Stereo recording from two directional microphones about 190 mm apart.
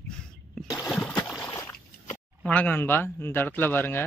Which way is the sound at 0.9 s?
5° left (ahead or behind).